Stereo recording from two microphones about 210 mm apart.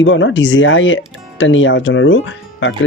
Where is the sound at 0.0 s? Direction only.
65° left (ahead or behind).